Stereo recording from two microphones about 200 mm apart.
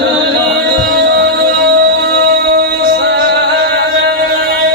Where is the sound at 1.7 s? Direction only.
60° right (ahead or behind).